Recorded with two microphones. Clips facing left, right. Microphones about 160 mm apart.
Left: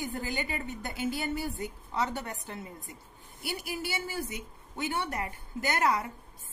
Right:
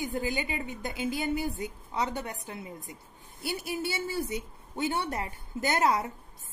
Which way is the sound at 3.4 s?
25° right (ahead or behind).